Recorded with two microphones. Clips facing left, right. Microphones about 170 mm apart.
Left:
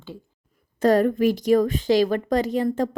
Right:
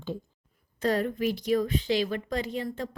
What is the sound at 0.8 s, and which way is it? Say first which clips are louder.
A woman's voice: left 9 dB; 45° left (ahead or behind).